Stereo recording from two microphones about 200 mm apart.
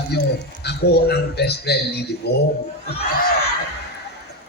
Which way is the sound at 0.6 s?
55° left (ahead or behind).